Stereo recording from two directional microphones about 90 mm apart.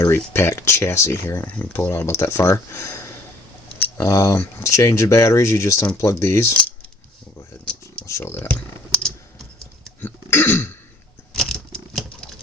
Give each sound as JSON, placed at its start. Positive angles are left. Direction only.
{"t": 0.3, "sound": "speech", "side_deg": 30}
{"t": 1.9, "sound": "speech", "side_deg": 30}
{"t": 7.6, "sound": "a sound", "side_deg": 10}
{"t": 8.0, "sound": "computer keyboard", "side_deg": 30}
{"t": 10.0, "sound": "throat clearing", "side_deg": 25}
{"t": 11.3, "sound": "patter", "side_deg": 5}